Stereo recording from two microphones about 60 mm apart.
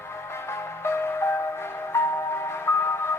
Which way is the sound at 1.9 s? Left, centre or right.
Left.